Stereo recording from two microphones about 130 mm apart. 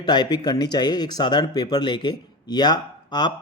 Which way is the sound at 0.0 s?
35° left (ahead or behind).